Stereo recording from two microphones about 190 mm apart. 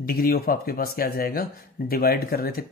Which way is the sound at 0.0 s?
50° left (ahead or behind).